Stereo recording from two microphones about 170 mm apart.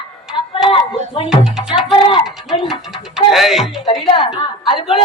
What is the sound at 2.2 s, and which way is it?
Music, centre (ahead or behind).